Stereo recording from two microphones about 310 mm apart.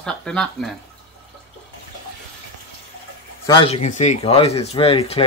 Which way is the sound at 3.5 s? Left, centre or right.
Centre.